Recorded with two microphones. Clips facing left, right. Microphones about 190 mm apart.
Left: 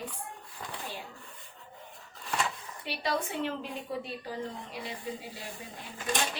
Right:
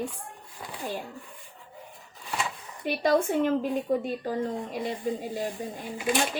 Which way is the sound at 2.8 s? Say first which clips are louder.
Right 9 dB; 45° right (ahead or behind).